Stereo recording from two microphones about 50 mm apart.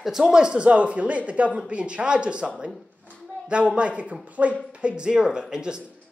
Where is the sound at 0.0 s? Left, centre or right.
Centre.